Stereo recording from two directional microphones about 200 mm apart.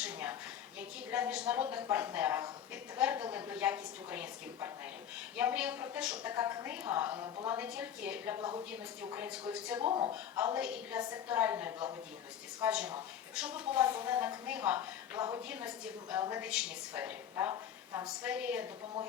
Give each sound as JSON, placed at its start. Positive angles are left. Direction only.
{"t": 0.0, "sound": "a sound", "side_deg": -5}
{"t": 0.8, "sound": "a woman's voice", "side_deg": -5}
{"t": 2.9, "sound": "a sound", "side_deg": -10}
{"t": 3.2, "sound": "a woman's voice", "side_deg": -10}
{"t": 8.4, "sound": "a woman's voice", "side_deg": -20}
{"t": 8.7, "sound": "a woman's voice", "side_deg": -10}